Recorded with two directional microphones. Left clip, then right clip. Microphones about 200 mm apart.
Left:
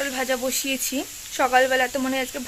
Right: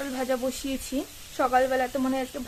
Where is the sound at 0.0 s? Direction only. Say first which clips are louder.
Left 4 dB; centre (ahead or behind).